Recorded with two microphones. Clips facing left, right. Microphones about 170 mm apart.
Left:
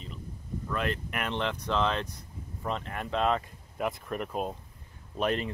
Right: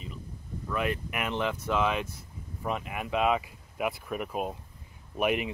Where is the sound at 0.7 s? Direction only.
10° right (ahead or behind).